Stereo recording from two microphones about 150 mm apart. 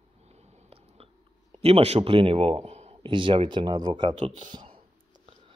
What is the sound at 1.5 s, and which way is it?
A man's voice, 40° right (ahead or behind).